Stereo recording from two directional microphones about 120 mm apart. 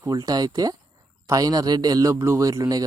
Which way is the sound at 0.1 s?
30° right (ahead or behind).